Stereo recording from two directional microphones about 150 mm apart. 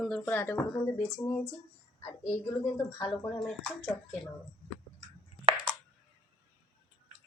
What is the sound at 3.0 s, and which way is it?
Speech, 25° left (ahead or behind).